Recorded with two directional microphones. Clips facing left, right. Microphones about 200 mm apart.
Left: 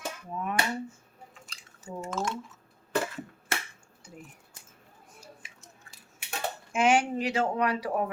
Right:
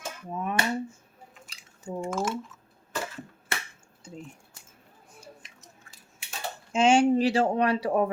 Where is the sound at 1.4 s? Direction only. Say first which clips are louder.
Right 6 dB; 5° right (ahead or behind).